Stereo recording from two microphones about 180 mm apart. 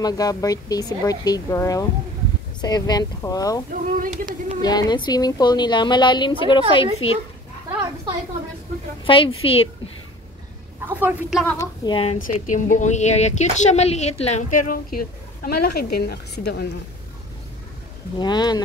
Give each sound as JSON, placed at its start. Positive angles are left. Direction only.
{"t": 0.0, "sound": "a woman's voice", "side_deg": 20}
{"t": 3.7, "sound": "speech", "side_deg": -50}
{"t": 4.6, "sound": "a woman's voice", "side_deg": 20}
{"t": 7.0, "sound": "a child's voice", "side_deg": 90}
{"t": 9.0, "sound": "a woman's voice", "side_deg": 30}
{"t": 10.9, "sound": "a woman's voice", "side_deg": -10}
{"t": 11.4, "sound": "a woman's voice", "side_deg": 15}
{"t": 12.2, "sound": "a woman's voice", "side_deg": 45}
{"t": 18.2, "sound": "a woman's voice", "side_deg": 25}